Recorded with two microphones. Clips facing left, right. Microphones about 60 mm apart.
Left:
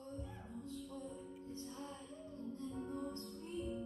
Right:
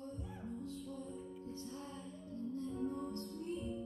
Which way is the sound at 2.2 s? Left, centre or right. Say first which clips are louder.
Right 4 dB; left.